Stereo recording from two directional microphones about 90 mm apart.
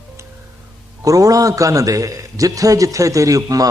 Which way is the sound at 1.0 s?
40° right (ahead or behind).